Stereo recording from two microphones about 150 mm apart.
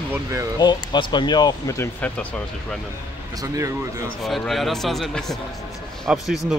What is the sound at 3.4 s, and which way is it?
Speech, 20° right (ahead or behind).